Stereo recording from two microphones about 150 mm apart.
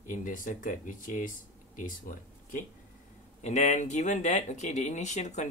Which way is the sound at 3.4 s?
50° left (ahead or behind).